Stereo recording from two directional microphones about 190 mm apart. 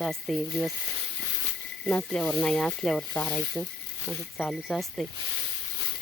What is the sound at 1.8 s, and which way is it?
Speech, 5° left (ahead or behind).